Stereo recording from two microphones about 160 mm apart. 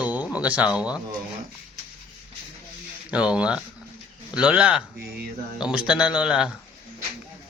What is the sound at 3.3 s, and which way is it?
A man's voice, 5° right (ahead or behind).